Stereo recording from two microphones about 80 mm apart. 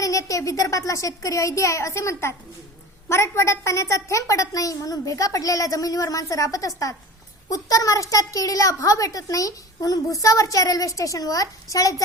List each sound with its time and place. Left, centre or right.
0.0 s a woman's voice: left